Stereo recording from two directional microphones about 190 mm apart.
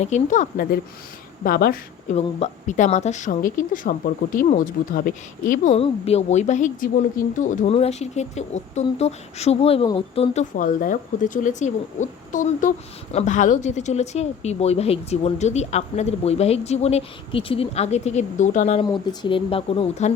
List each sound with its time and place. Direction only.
0.0 s a woman's voice: 40° left (ahead or behind)
2.1 s speech: 35° left (ahead or behind)
5.7 s speech: 30° left (ahead or behind)
10.5 s speech: 45° left (ahead or behind)
18.8 s speech: 25° left (ahead or behind)